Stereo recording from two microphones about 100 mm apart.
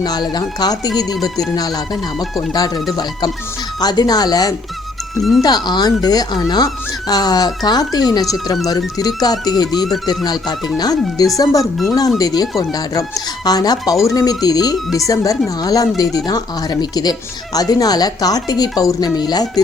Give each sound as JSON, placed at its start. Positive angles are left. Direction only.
{"t": 0.0, "sound": "speech", "side_deg": 45}
{"t": 5.1, "sound": "speech", "side_deg": 0}
{"t": 5.4, "sound": "speech", "side_deg": 45}
{"t": 11.6, "sound": "speech", "side_deg": 0}
{"t": 12.2, "sound": "speech", "side_deg": 40}